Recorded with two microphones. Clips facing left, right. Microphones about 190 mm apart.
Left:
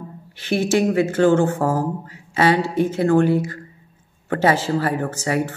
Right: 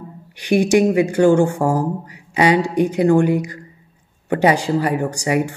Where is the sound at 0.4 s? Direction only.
15° right (ahead or behind).